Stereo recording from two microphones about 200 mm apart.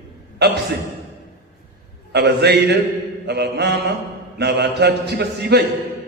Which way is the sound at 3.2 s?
55° right (ahead or behind).